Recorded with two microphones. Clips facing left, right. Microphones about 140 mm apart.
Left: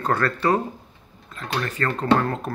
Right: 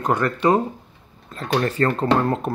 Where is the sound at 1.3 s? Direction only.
35° right (ahead or behind).